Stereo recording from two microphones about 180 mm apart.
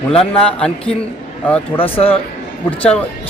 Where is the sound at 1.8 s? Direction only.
30° left (ahead or behind).